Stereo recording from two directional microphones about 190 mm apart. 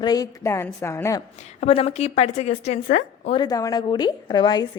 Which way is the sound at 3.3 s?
20° left (ahead or behind).